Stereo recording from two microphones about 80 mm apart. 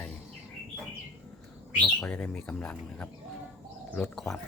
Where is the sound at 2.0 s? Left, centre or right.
Centre.